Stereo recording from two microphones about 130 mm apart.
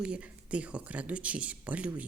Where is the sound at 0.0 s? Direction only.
10° right (ahead or behind).